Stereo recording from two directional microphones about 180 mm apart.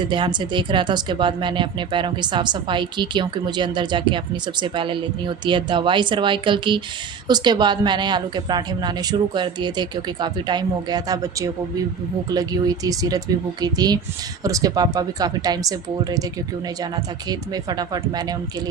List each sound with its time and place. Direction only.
0.1 s speech: 25° right (ahead or behind)
17.2 s speech: 20° right (ahead or behind)